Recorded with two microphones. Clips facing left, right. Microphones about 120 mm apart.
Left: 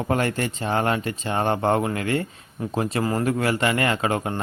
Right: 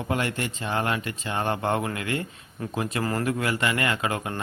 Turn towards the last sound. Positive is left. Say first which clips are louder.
# left 4 dB
turn(degrees=30)  # may be behind; listen again after turning